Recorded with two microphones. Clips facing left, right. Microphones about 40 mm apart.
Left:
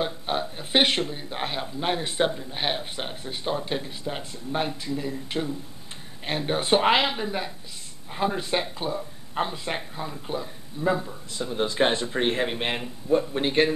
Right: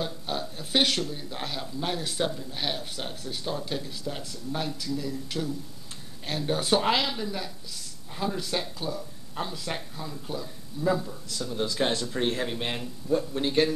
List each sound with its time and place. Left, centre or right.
0.0 s a man's voice: left